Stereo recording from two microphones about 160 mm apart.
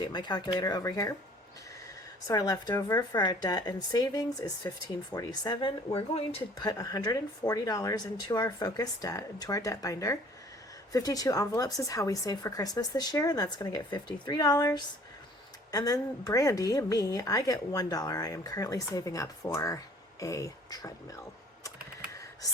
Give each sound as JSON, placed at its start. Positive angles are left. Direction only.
{"t": 0.0, "sound": "a woman's voice", "side_deg": 25}
{"t": 2.2, "sound": "a woman's voice", "side_deg": 20}
{"t": 6.7, "sound": "a woman's voice", "side_deg": 25}
{"t": 22.1, "sound": "whispering", "side_deg": 20}